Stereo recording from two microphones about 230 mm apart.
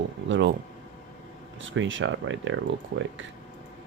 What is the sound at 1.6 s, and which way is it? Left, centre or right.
Speech, right.